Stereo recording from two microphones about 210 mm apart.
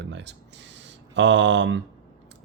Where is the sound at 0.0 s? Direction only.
55° right (ahead or behind).